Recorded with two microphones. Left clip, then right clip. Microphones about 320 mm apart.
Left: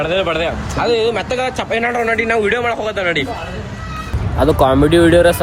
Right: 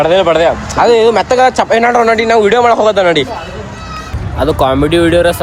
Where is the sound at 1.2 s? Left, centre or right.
Right.